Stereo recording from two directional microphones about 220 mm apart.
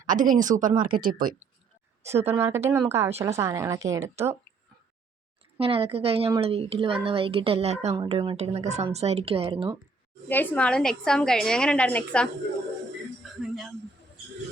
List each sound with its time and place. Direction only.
0.0 s a woman's voice: 35° right (ahead or behind)
2.0 s a woman's voice: 30° right (ahead or behind)
2.6 s speech: 10° right (ahead or behind)
5.5 s a woman's voice: 25° right (ahead or behind)
10.2 s a woman's voice: 10° left (ahead or behind)
13.4 s a sound: centre (ahead or behind)